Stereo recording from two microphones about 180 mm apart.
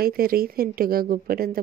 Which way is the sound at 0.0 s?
55° right (ahead or behind).